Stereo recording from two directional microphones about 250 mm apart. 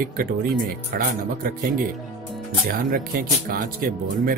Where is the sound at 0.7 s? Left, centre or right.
Right.